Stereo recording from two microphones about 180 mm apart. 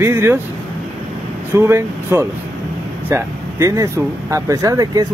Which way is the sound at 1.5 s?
15° right (ahead or behind).